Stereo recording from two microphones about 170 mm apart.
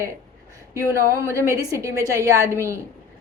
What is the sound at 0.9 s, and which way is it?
A woman's voice, 15° right (ahead or behind).